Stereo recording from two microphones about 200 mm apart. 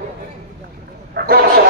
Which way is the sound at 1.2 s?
55° right (ahead or behind).